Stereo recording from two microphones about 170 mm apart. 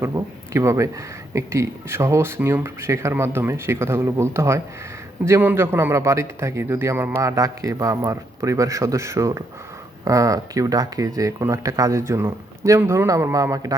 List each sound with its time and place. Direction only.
0.0 s a man's voice: 15° right (ahead or behind)